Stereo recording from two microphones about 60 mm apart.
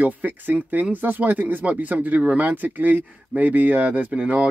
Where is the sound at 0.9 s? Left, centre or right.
Right.